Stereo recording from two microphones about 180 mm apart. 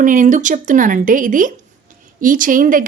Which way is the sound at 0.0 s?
45° right (ahead or behind).